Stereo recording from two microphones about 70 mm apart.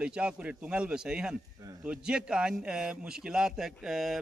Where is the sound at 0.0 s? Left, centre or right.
Centre.